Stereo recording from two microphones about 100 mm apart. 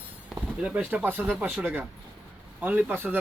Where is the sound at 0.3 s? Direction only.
15° right (ahead or behind).